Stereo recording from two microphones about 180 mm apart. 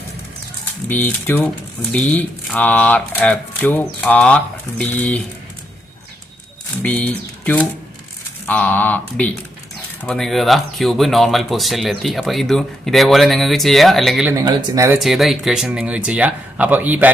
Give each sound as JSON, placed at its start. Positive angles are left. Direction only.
{"t": 0.9, "sound": "speech", "side_deg": 10}
{"t": 6.8, "sound": "speech", "side_deg": 10}
{"t": 14.3, "sound": "speech", "side_deg": -15}
{"t": 14.9, "sound": "speech", "side_deg": 0}